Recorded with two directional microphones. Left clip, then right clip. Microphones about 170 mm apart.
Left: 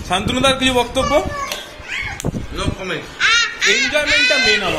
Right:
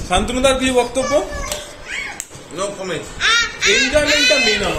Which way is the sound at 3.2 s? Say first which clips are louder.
Left 1 dB; 15° left (ahead or behind).